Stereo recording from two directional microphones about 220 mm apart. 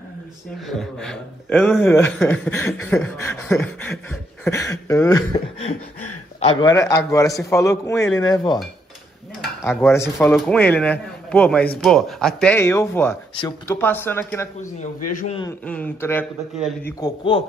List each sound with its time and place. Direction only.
0.7 s speech: centre (ahead or behind)
6.6 s speech: 15° left (ahead or behind)
9.6 s a man's voice: 10° left (ahead or behind)
13.3 s a man's voice: 20° left (ahead or behind)
13.7 s speech: 10° left (ahead or behind)
15.1 s a man's voice: 30° left (ahead or behind)
15.6 s speech: 5° left (ahead or behind)
16.8 s a man's voice: 20° left (ahead or behind)